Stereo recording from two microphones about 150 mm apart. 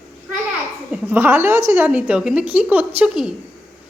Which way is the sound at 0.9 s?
10° right (ahead or behind).